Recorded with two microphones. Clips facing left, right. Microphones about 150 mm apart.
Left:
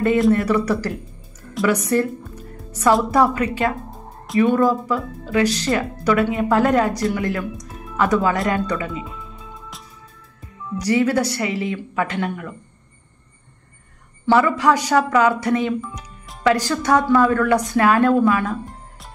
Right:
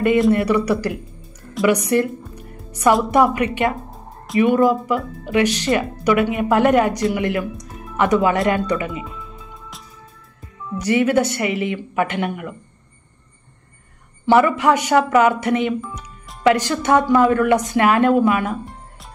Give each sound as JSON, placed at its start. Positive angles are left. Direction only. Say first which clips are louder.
{"t": 0.3, "sound": "speech", "louder": "right 1 dB", "side_deg": -15}
{"t": 10.8, "sound": "speech", "louder": "right 1 dB", "side_deg": -20}
{"t": 14.2, "sound": "speech", "louder": "right 2 dB", "side_deg": -20}